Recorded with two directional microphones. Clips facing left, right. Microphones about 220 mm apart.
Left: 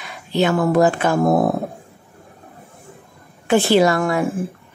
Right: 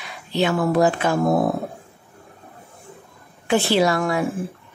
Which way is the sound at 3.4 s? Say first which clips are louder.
Left 4 dB; 50° left (ahead or behind).